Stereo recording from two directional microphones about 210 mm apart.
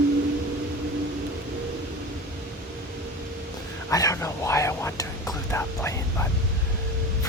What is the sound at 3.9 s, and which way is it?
Whispering, 15° left (ahead or behind).